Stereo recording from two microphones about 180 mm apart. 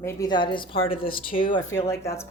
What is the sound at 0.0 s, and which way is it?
Speech, 20° left (ahead or behind).